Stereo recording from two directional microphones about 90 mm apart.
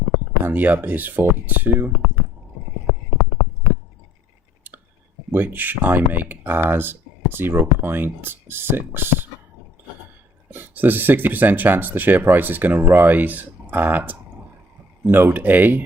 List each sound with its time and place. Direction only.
0.4 s speech: 20° right (ahead or behind)
5.3 s speech: 20° right (ahead or behind)
10.5 s speech: 20° right (ahead or behind)